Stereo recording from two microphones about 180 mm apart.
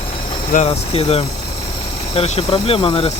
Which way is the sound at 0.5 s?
35° left (ahead or behind).